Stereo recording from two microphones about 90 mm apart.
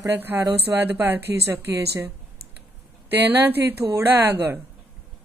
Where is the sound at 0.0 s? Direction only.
35° right (ahead or behind).